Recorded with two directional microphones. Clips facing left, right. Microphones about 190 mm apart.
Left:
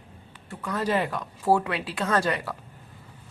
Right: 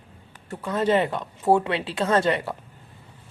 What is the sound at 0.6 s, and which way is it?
Speech, 25° right (ahead or behind).